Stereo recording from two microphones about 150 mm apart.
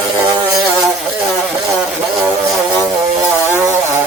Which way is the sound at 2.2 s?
15° right (ahead or behind).